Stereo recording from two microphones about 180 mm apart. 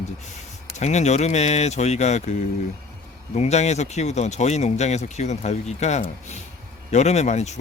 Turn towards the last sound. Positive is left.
turn(degrees=40)  # may be behind; listen again after turning